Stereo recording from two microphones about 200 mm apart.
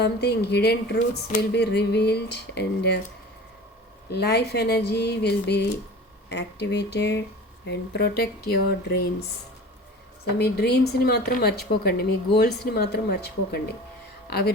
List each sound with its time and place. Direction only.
0.0 s a woman's voice: 55° left (ahead or behind)
4.1 s a woman's voice: 55° left (ahead or behind)
10.3 s a woman's voice: 55° left (ahead or behind)